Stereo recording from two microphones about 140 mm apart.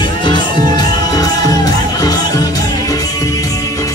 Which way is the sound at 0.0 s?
35° left (ahead or behind).